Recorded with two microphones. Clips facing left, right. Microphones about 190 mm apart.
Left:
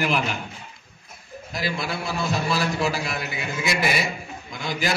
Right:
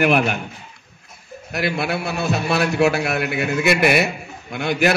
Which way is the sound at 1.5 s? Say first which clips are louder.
Right 6 dB; 65° right (ahead or behind).